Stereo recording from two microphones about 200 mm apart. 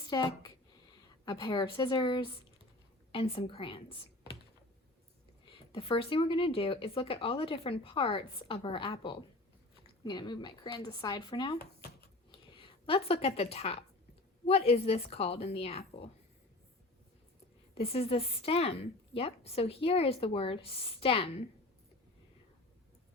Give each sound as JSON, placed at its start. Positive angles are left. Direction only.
{"t": 0.1, "sound": "speech", "side_deg": 20}
{"t": 5.5, "sound": "speech", "side_deg": 25}
{"t": 11.6, "sound": "a sound", "side_deg": 50}
{"t": 12.5, "sound": "a woman's voice", "side_deg": 30}
{"t": 17.7, "sound": "speech", "side_deg": 30}